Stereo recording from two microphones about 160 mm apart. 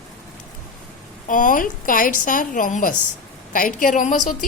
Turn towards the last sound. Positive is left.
turn(degrees=50)  # may be behind; listen again after turning